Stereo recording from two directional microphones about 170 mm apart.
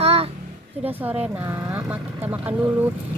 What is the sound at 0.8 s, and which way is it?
Speech, 10° right (ahead or behind).